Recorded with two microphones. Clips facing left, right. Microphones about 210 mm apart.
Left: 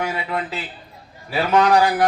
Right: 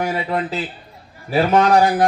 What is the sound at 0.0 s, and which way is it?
A man's voice, 40° right (ahead or behind).